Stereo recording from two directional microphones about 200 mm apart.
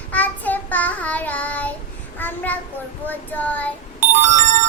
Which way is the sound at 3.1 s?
10° left (ahead or behind).